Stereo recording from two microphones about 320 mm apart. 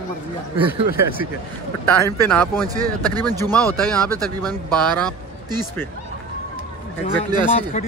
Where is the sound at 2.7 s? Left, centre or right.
Centre.